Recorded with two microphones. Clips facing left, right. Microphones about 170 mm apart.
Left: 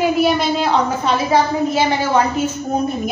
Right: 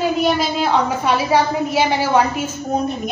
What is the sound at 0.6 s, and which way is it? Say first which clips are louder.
A woman's voice: left 1 dB; 10° right (ahead or behind).